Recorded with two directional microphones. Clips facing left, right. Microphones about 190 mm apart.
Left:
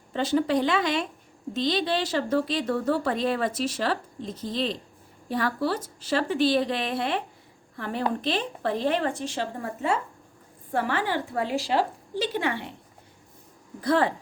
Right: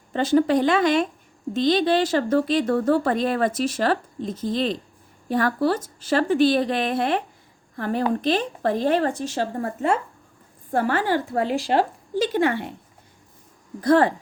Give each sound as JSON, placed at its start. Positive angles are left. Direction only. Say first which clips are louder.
{"t": 0.1, "sound": "speech", "louder": "right 5 dB", "side_deg": -50}
{"t": 13.8, "sound": "speech", "louder": "right 6 dB", "side_deg": -45}